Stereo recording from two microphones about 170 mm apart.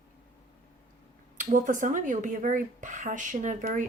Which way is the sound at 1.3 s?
50° right (ahead or behind).